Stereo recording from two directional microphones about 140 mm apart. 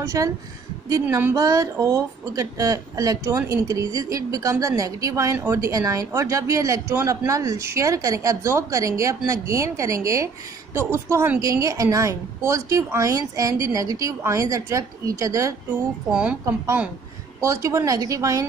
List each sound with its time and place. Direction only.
0.2 s speech: 20° right (ahead or behind)
16.1 s speech: 5° right (ahead or behind); by 18.5 s 25° right (ahead or behind)